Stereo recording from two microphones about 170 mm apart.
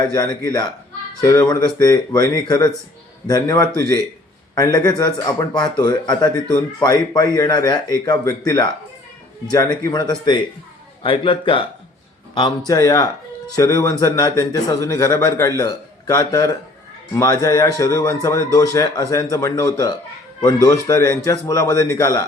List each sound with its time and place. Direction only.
0.0 s a man's voice: 25° left (ahead or behind)